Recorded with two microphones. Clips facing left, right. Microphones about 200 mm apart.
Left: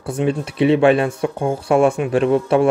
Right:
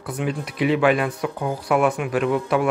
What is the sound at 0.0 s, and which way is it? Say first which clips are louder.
Speech: left 6 dB; 25° left (ahead or behind).